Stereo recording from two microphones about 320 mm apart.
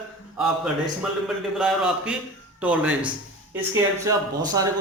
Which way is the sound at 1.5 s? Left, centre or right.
Centre.